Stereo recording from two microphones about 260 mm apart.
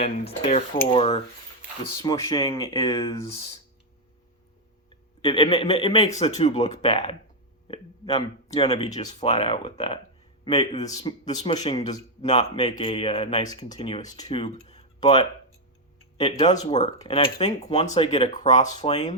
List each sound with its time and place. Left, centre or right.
0.0 s speech: left
5.2 s a man's voice: left
16.5 s speech: left